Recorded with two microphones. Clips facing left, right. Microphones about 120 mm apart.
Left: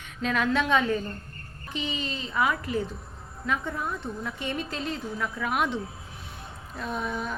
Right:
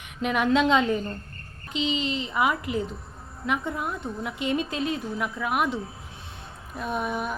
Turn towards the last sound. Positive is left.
turn(degrees=-15)  # may be behind; listen again after turning